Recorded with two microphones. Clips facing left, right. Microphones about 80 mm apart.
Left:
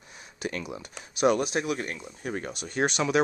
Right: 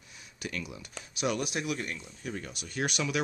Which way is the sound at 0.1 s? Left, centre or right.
Left.